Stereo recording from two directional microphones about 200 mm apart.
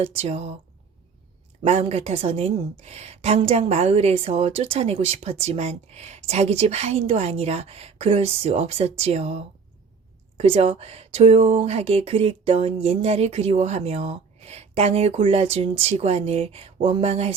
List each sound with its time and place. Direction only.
0.0 s a woman's voice: 30° right (ahead or behind)
1.6 s a woman's voice: 30° right (ahead or behind)